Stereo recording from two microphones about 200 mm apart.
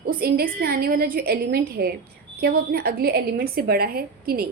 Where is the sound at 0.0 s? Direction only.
50° right (ahead or behind).